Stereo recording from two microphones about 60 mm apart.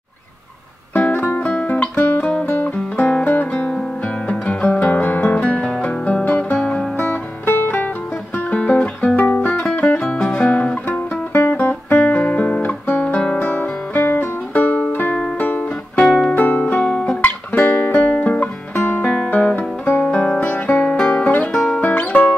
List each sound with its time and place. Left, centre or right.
0.9 s music: left
2.7 s music: left
3.3 s guitar: left
4.3 s music: centre
7.0 s music: left
10.9 s guitar: left
13.4 s music: left
16.0 s music: centre
16.3 s music: left
17.2 s music: left
19.3 s guitar: left
21.1 s music: left
21.5 s music: centre
21.8 s music: left